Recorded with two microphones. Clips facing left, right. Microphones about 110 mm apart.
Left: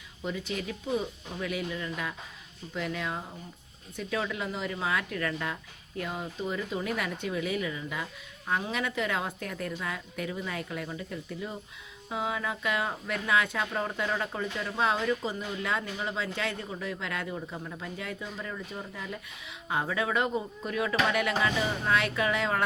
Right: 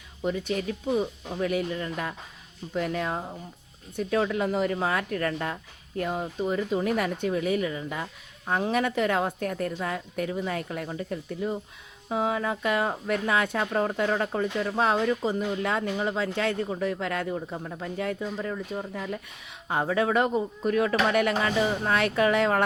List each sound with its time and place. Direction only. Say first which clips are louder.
0.3 s a woman's voice: right 6 dB; 45° right (ahead or behind)
17.3 s speech: right 4 dB; 25° right (ahead or behind)
17.9 s speech: right 11 dB; 40° right (ahead or behind)
18.4 s a woman's voice: right 6 dB; 25° right (ahead or behind); by 22.6 s 45° right (ahead or behind)